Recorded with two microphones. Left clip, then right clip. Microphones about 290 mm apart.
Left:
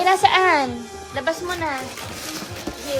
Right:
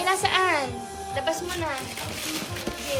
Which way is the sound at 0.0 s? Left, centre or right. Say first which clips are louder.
Left 7 dB; left.